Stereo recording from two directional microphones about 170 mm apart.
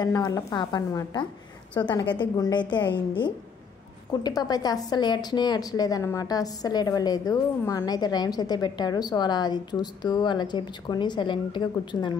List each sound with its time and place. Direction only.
0.0 s a woman's voice: 20° left (ahead or behind)
4.2 s a woman's voice: 20° left (ahead or behind)